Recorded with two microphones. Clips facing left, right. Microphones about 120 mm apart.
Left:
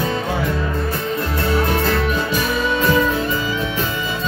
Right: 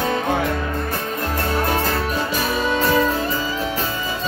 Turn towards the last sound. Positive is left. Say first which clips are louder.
# left 1 dB
turn(degrees=-35)  # may be behind; listen again after turning